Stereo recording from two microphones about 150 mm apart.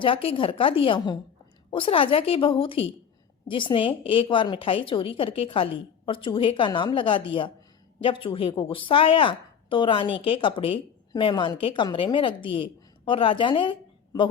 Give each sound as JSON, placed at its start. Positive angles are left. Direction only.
{"t": 0.0, "sound": "a woman's voice", "side_deg": 35}